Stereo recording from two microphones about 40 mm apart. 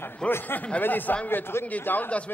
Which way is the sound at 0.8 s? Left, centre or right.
Left.